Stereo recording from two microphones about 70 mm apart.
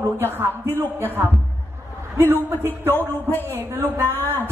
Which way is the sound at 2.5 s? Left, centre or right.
Right.